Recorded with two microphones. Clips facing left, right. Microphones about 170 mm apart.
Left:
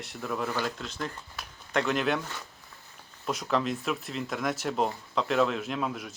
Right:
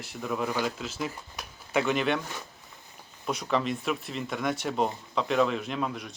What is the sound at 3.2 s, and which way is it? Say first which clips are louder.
Speech: even; centre (ahead or behind).